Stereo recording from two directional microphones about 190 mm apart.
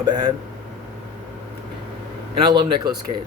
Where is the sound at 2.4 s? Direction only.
25° right (ahead or behind).